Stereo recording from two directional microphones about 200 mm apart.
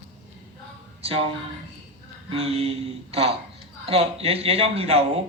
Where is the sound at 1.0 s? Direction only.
30° right (ahead or behind).